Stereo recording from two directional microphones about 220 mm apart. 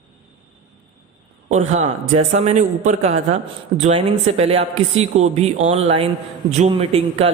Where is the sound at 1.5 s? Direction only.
30° right (ahead or behind).